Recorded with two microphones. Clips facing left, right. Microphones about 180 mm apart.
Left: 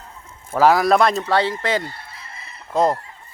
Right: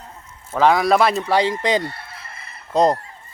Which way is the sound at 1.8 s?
65° right (ahead or behind).